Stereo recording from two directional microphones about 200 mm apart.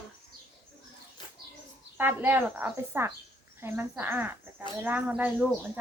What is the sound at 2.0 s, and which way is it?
Speech, 10° right (ahead or behind).